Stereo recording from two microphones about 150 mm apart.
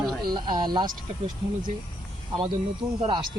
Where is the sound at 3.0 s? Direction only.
30° right (ahead or behind).